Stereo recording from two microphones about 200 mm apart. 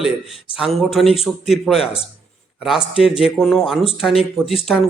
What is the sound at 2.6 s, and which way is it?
A man's voice, 5° right (ahead or behind).